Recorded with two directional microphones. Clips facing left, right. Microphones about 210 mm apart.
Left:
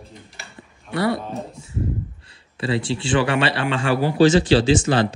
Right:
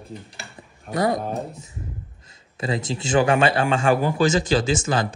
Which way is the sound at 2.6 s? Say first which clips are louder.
Left 3 dB; 40° right (ahead or behind).